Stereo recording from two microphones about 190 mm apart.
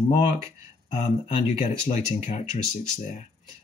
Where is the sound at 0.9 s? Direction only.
35° left (ahead or behind).